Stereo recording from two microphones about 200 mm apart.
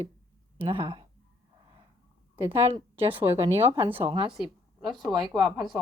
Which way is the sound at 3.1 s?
10° right (ahead or behind).